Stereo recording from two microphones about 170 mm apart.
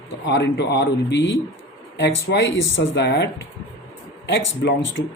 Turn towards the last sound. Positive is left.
turn(degrees=90)